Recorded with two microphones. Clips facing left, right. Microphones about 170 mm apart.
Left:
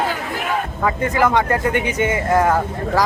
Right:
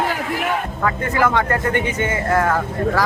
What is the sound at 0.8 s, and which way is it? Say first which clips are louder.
Speech: left 1 dB; 15° left (ahead or behind).